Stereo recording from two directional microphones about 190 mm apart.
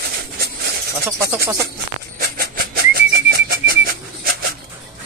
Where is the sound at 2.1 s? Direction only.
55° right (ahead or behind).